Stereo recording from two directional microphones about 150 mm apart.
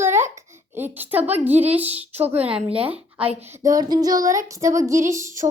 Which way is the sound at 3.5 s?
25° right (ahead or behind).